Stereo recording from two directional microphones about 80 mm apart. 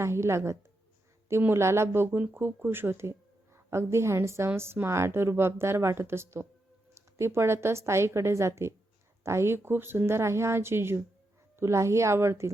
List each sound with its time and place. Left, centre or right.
0.0 s speech: right